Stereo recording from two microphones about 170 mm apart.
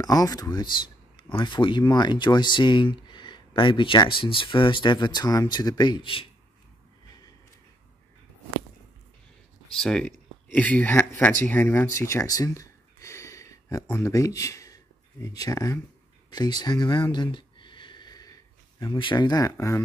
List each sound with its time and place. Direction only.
0.0 s speech: 20° left (ahead or behind)
9.8 s speech: 5° left (ahead or behind); by 15.8 s 20° left (ahead or behind)
16.3 s a sound: 25° left (ahead or behind)
18.8 s speech: 30° left (ahead or behind)